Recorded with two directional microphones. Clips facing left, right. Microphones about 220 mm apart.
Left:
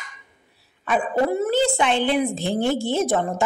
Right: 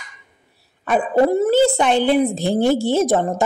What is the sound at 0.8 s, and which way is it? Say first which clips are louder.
A woman's voice: right 5 dB; 35° right (ahead or behind).